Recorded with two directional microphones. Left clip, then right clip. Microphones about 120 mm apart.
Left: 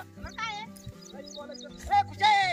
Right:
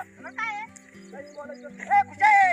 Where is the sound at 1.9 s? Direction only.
10° left (ahead or behind).